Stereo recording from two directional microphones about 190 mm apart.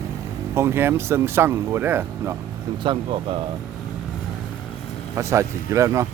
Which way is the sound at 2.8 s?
25° right (ahead or behind).